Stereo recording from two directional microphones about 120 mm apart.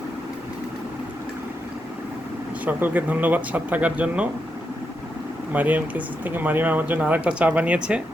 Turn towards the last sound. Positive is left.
turn(degrees=-10)  # may be behind; listen again after turning